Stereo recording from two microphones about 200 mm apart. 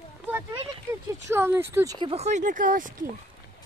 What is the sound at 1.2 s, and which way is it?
Speech, 10° right (ahead or behind).